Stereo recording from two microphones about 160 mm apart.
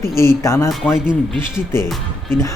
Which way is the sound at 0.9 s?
5° right (ahead or behind).